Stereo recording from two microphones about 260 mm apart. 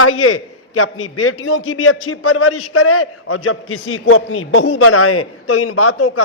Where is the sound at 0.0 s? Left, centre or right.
Left.